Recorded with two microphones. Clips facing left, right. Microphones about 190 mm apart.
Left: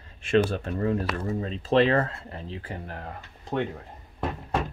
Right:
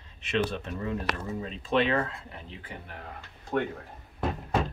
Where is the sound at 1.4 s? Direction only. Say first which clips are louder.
Left 5 dB; 40° left (ahead or behind).